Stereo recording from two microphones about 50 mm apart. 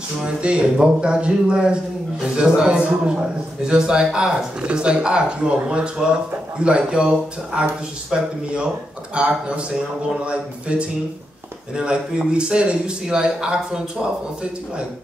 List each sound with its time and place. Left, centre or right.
0.2 s a man's voice: right